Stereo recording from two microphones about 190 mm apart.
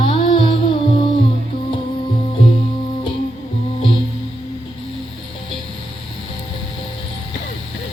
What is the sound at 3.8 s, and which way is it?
Music, 30° left (ahead or behind).